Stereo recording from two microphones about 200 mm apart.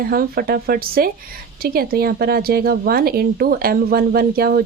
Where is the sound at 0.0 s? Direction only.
45° right (ahead or behind).